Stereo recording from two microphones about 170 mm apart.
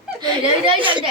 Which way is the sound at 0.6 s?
30° right (ahead or behind).